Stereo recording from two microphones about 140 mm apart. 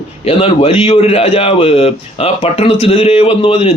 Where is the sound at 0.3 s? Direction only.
45° left (ahead or behind).